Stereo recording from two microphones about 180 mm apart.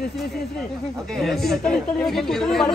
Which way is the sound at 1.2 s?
Centre (ahead or behind).